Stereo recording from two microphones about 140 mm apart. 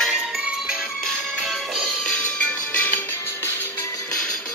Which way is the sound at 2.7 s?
15° left (ahead or behind).